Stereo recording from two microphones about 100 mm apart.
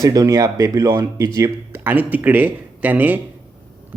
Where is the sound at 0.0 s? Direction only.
35° right (ahead or behind).